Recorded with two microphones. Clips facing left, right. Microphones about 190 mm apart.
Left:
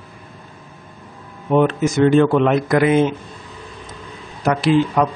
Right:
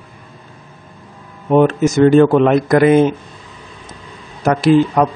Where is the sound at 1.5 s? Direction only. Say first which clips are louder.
Right 4 dB; 45° right (ahead or behind).